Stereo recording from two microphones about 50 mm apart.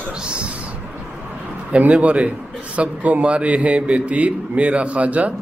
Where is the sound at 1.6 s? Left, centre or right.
Right.